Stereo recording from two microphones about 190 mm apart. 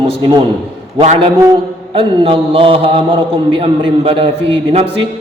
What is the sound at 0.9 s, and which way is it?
A man's voice, 30° right (ahead or behind).